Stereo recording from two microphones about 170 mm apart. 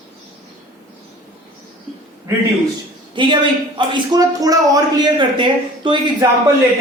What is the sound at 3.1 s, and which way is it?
A man's voice, 30° right (ahead or behind).